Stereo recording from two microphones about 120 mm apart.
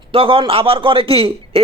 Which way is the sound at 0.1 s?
50° right (ahead or behind).